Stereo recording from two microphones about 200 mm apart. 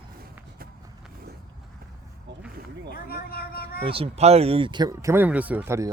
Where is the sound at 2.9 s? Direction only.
50° left (ahead or behind).